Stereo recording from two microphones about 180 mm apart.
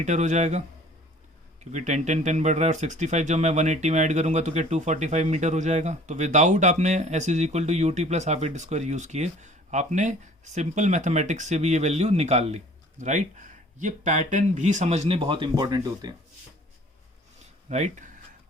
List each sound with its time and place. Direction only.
0.0 s speech: 40° right (ahead or behind)
1.7 s speech: 40° right (ahead or behind); by 16.1 s 20° right (ahead or behind)
17.7 s speech: 40° right (ahead or behind)